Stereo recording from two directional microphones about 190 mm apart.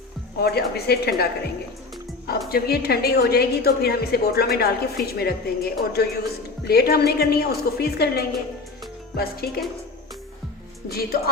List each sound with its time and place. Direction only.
0.3 s a woman's voice: 60° left (ahead or behind)
2.5 s a woman's voice: 55° left (ahead or behind)
9.1 s music: 55° left (ahead or behind)
10.8 s a woman's voice: 55° left (ahead or behind)